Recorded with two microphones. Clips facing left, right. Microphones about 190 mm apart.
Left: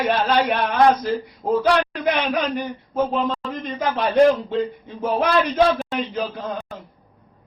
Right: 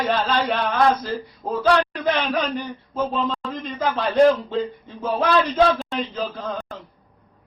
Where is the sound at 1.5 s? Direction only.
15° left (ahead or behind).